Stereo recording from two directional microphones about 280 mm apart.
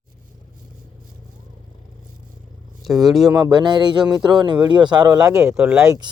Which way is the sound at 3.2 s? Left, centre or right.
Centre.